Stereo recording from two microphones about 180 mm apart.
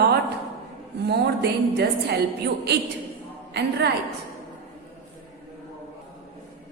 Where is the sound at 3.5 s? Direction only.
70° right (ahead or behind).